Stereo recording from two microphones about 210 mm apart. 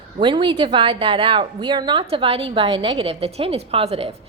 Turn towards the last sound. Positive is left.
turn(degrees=-25)  # may be behind; listen again after turning